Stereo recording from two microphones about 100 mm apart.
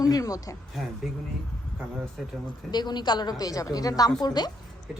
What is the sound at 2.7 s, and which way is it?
A woman's voice, 45° left (ahead or behind).